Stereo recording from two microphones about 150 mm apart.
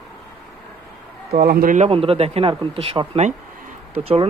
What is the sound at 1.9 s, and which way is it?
Speech, 40° right (ahead or behind).